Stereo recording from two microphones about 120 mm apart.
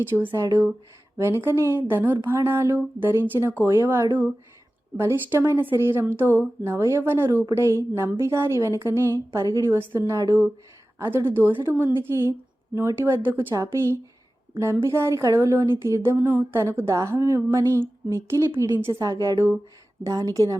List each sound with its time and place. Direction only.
0.0 s speech: 15° right (ahead or behind)